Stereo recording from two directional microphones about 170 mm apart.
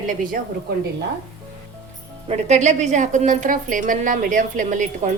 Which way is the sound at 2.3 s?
40° right (ahead or behind).